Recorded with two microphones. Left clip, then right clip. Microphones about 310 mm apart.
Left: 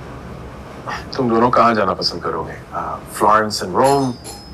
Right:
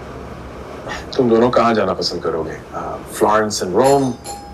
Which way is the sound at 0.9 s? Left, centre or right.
Centre.